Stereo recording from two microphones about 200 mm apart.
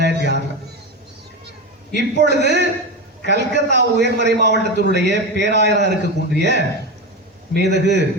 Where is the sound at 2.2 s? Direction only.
60° right (ahead or behind).